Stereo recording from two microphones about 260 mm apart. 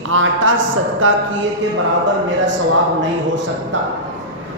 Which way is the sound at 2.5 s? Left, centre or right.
Right.